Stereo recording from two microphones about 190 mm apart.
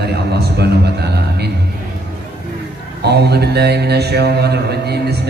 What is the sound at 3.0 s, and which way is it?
Mantra, 60° right (ahead or behind).